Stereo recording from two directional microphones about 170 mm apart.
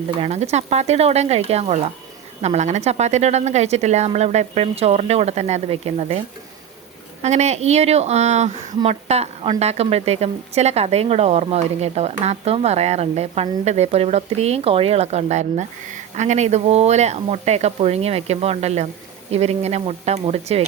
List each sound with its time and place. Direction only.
0.2 s speech: 40° right (ahead or behind)